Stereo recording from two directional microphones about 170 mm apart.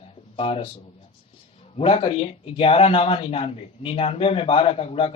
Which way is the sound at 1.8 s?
35° left (ahead or behind).